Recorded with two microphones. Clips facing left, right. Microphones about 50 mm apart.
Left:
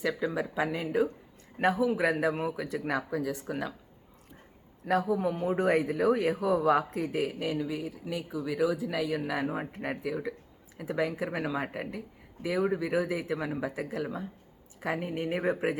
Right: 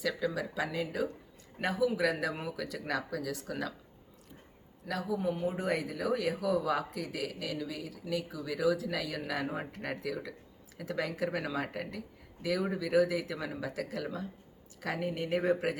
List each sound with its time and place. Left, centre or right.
0.0 s a man's voice: left
4.9 s speech: left